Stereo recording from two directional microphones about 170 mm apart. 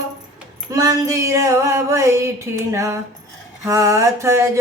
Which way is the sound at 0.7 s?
20° right (ahead or behind).